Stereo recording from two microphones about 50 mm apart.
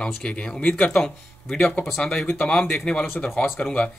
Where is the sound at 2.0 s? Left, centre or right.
Centre.